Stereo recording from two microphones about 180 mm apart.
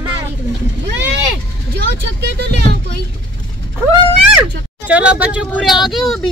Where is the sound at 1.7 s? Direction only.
65° right (ahead or behind).